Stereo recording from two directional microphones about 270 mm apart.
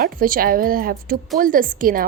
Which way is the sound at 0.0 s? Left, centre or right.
Right.